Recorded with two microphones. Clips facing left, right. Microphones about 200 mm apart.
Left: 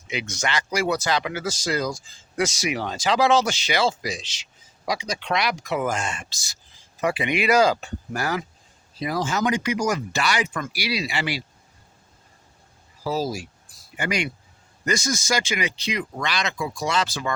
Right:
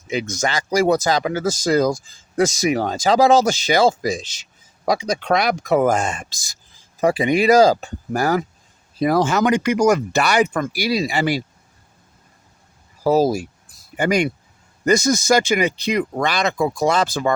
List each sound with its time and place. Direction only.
0.1 s speech: 45° right (ahead or behind)
7.0 s speech: 40° right (ahead or behind)
9.0 s speech: 60° right (ahead or behind)
13.1 s speech: 55° right (ahead or behind)